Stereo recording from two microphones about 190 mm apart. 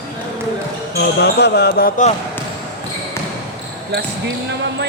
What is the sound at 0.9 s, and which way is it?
Speech, 60° left (ahead or behind).